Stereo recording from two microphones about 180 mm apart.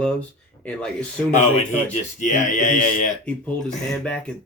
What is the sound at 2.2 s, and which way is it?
Speech, 45° left (ahead or behind).